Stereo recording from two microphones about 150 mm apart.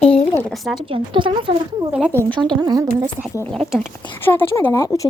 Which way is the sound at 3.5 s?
5° left (ahead or behind).